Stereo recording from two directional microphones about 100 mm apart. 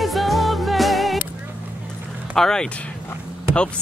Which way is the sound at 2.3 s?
5° left (ahead or behind).